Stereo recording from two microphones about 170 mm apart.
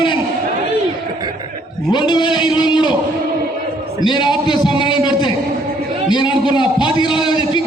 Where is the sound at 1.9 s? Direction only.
25° left (ahead or behind).